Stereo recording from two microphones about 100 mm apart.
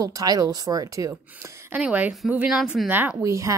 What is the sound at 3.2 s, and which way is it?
Speech, 30° right (ahead or behind).